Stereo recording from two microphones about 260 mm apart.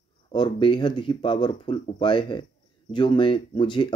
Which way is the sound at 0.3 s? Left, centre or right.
Centre.